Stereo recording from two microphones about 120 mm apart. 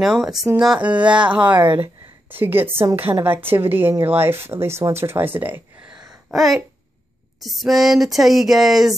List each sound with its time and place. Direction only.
0.2 s speech: 5° right (ahead or behind)
5.9 s a sound: centre (ahead or behind)
7.4 s speech: centre (ahead or behind)